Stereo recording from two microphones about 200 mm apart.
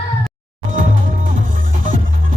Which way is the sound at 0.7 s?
40° right (ahead or behind).